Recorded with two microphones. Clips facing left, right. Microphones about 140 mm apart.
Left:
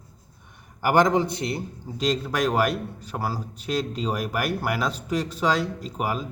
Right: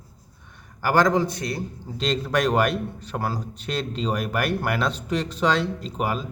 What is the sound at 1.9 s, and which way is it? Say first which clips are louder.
A man's voice: right 1 dB; 10° left (ahead or behind).